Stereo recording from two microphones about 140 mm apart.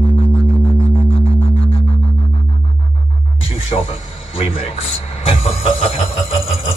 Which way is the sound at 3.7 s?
45° left (ahead or behind).